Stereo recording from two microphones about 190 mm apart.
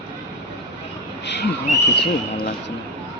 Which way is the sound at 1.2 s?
65° left (ahead or behind).